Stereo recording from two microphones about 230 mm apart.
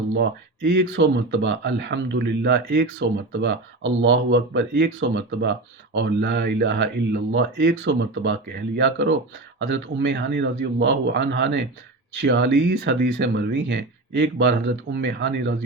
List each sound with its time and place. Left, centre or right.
0.1 s speech: right